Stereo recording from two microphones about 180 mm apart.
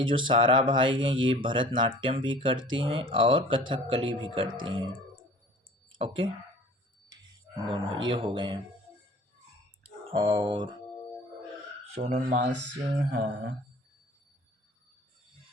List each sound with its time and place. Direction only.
0.0 s speech: 30° right (ahead or behind)
6.0 s speech: 30° right (ahead or behind)
7.7 s speech: 25° right (ahead or behind)
10.1 s speech: 25° right (ahead or behind)
12.0 s speech: 40° right (ahead or behind)
13.1 s mantra: 50° right (ahead or behind)